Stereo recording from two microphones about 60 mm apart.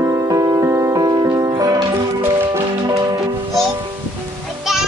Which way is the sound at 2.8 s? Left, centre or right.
Right.